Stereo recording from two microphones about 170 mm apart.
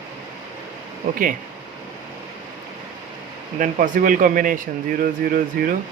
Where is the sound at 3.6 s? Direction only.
50° right (ahead or behind).